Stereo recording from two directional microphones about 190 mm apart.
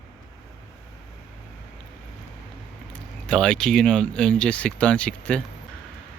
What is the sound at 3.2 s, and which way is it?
Speech, 5° left (ahead or behind).